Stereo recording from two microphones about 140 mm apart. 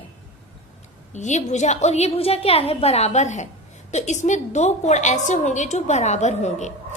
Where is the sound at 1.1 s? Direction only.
55° left (ahead or behind).